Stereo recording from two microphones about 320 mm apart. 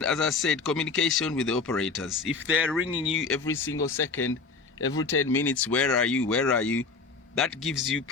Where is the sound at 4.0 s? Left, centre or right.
Left.